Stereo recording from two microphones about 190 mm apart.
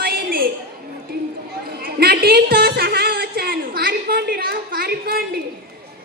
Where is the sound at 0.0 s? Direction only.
50° right (ahead or behind).